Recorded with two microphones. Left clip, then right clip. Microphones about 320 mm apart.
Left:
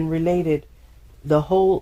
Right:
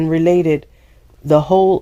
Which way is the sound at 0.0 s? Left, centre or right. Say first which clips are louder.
Right 8 dB; right.